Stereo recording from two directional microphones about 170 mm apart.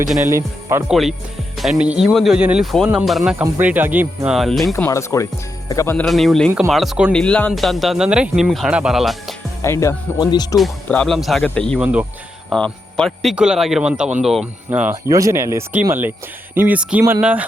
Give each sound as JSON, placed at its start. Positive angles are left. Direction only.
{"t": 0.2, "sound": "speech", "side_deg": -15}
{"t": 0.9, "sound": "speech", "side_deg": 0}
{"t": 4.4, "sound": "speech", "side_deg": 0}
{"t": 4.7, "sound": "speech", "side_deg": 15}
{"t": 6.1, "sound": "speech", "side_deg": 0}
{"t": 9.6, "sound": "speech", "side_deg": 15}
{"t": 10.6, "sound": "speech", "side_deg": 5}
{"t": 11.8, "sound": "speech", "side_deg": -5}
{"t": 12.5, "sound": "speech", "side_deg": 5}